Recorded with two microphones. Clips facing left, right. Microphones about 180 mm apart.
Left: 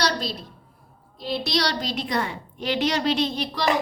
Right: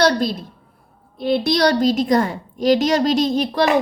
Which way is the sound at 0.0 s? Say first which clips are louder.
Right 9 dB; 50° right (ahead or behind).